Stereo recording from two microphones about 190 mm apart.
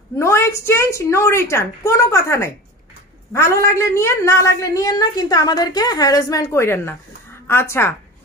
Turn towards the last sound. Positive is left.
turn(degrees=15)  # may be behind; listen again after turning